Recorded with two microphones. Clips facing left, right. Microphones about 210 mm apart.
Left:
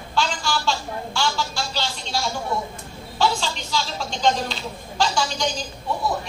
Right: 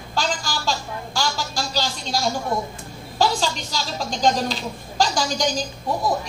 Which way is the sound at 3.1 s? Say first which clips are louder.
Right 2 dB; 40° right (ahead or behind).